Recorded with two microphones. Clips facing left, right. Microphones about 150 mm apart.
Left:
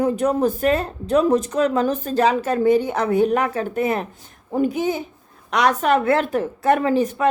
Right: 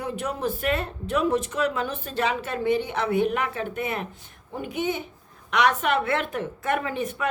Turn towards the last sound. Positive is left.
turn(degrees=40)  # may be behind; listen again after turning